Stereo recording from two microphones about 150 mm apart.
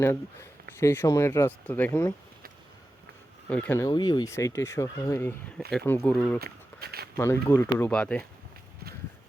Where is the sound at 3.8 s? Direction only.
25° left (ahead or behind); by 6.4 s 10° left (ahead or behind).